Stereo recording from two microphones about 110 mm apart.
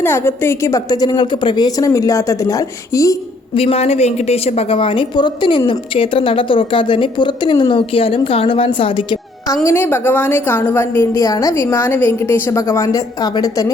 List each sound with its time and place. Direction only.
0.0 s a woman's voice: 20° left (ahead or behind)
3.5 s a woman's voice: 60° left (ahead or behind); by 7.8 s 40° left (ahead or behind)
7.8 s a woman's voice: 60° left (ahead or behind)
9.6 s a woman's voice: 20° left (ahead or behind)
11.2 s a woman's voice: 30° left (ahead or behind)